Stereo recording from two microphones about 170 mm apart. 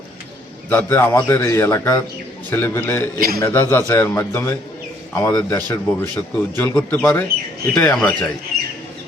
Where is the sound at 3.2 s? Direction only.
65° right (ahead or behind).